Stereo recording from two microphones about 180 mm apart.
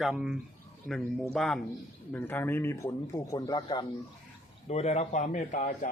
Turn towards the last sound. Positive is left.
turn(degrees=40)  # may be behind; listen again after turning